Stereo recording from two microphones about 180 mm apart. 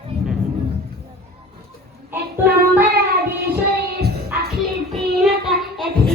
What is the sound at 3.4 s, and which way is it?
Child singing, 60° right (ahead or behind).